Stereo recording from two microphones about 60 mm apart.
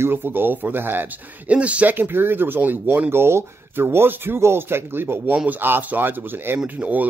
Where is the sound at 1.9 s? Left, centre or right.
Right.